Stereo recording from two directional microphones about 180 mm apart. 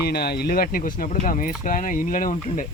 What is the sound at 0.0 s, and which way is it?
Speech, 60° left (ahead or behind).